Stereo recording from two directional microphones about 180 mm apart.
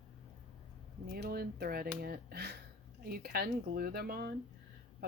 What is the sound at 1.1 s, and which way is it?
Speech, 60° right (ahead or behind).